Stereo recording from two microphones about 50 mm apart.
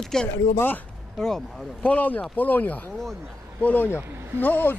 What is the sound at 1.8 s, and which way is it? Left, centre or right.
Speech, left.